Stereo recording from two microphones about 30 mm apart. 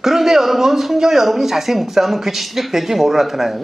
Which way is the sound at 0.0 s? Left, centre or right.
Centre.